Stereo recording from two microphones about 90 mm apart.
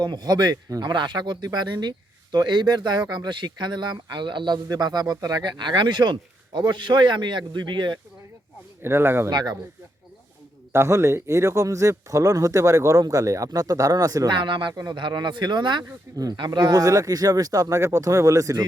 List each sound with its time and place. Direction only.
0.0 s speech: 50° right (ahead or behind)
8.8 s speech: 25° right (ahead or behind)
9.3 s speech: 50° right (ahead or behind)
10.7 s speech: 30° right (ahead or behind)
14.3 s speech: 60° right (ahead or behind)
14.7 s speech: 45° right (ahead or behind)
14.9 s speech: 60° right (ahead or behind); by 18.6 s 40° right (ahead or behind)